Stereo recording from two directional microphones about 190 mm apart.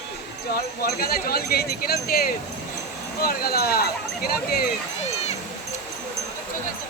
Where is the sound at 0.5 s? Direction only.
55° left (ahead or behind).